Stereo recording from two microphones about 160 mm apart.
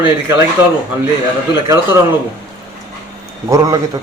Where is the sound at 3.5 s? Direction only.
20° right (ahead or behind).